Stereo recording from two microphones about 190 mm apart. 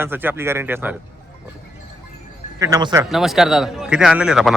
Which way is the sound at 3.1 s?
Centre (ahead or behind).